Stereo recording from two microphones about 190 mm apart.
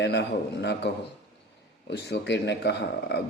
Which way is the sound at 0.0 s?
60° left (ahead or behind).